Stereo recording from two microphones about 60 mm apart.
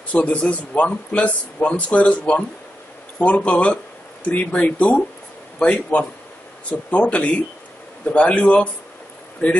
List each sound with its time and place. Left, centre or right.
0.1 s a man's voice: left